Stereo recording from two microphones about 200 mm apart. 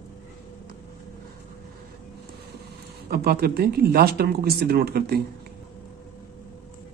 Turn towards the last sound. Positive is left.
turn(degrees=-50)  # may be behind; listen again after turning